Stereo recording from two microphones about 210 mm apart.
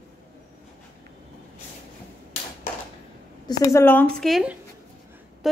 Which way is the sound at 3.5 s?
15° left (ahead or behind).